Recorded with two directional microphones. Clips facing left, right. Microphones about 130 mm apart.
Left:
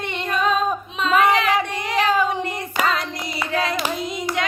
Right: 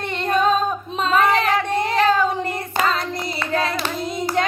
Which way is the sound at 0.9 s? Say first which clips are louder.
Even; 40° right (ahead or behind).